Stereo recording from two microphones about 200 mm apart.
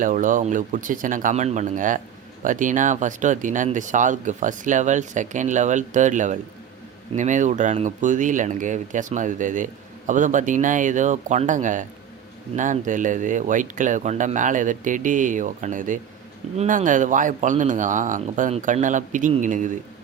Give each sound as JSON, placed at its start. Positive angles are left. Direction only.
{"t": 0.0, "sound": "speech", "side_deg": -40}